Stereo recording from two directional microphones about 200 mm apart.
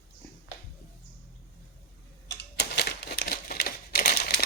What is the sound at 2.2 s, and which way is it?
Crumpling, 60° left (ahead or behind).